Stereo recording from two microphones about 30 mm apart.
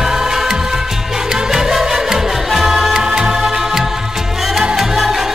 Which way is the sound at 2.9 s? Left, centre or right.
Right.